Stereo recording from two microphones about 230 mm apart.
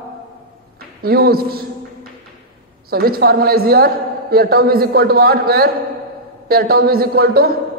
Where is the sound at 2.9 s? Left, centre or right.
Right.